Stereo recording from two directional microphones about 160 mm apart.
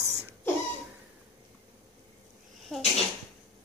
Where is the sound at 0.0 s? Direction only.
20° right (ahead or behind).